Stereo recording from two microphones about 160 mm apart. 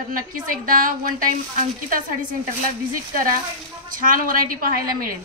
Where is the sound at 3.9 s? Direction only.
60° right (ahead or behind).